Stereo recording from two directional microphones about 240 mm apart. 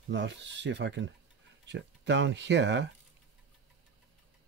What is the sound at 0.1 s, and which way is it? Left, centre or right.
Speech, right.